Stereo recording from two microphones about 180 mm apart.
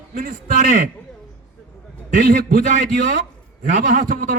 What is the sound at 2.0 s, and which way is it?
A man's voice, 45° right (ahead or behind).